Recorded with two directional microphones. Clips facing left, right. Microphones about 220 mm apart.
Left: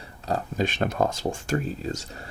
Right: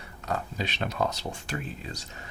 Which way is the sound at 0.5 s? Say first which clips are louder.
Left 7 dB; 50° left (ahead or behind).